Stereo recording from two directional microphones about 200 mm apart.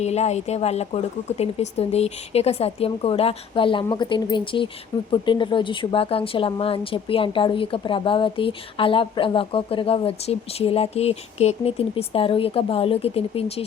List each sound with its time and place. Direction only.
0.0 s speech: 35° left (ahead or behind)